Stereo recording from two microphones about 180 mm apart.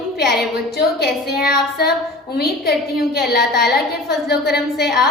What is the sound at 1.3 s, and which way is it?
Child singing, 60° left (ahead or behind).